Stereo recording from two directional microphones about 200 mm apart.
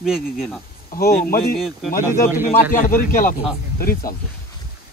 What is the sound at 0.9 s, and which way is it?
Speech, 45° left (ahead or behind).